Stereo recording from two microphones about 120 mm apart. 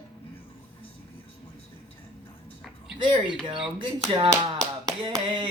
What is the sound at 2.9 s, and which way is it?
Speech, 40° right (ahead or behind).